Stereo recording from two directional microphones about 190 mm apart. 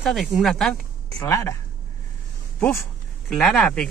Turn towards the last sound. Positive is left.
turn(degrees=5)  # may be behind; listen again after turning